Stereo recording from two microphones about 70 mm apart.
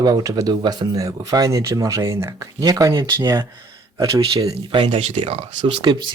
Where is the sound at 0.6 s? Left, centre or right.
Right.